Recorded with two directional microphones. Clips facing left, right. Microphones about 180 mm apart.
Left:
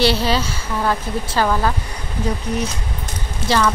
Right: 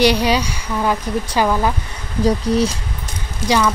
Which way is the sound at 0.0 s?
15° right (ahead or behind).